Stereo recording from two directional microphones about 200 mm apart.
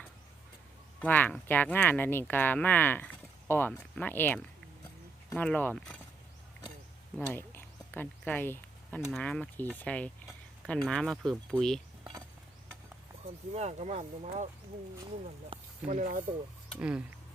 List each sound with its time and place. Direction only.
1.0 s speech: 10° left (ahead or behind)
7.3 s a sound: 10° left (ahead or behind)
9.0 s speech: 5° left (ahead or behind)
13.2 s speech: 35° right (ahead or behind)
15.5 s snake: 25° right (ahead or behind)
15.9 s speech: 40° right (ahead or behind)
16.7 s speech: 5° right (ahead or behind)